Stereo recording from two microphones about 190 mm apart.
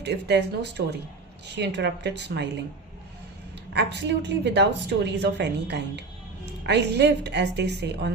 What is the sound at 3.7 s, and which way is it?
A woman's voice, 65° right (ahead or behind).